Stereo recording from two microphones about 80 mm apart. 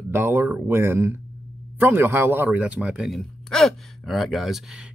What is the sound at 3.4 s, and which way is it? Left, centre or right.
Speech, centre.